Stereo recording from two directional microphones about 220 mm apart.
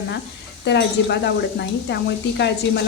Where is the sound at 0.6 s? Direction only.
50° left (ahead or behind).